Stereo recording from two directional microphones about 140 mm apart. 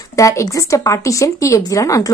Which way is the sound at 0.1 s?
25° left (ahead or behind).